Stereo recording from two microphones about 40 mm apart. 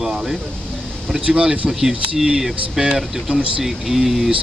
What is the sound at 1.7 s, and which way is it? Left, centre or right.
Speech, centre.